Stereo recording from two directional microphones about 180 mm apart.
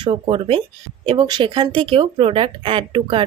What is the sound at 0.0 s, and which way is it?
Speech, 30° right (ahead or behind).